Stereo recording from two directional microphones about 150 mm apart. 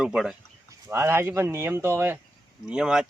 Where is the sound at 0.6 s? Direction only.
15° right (ahead or behind).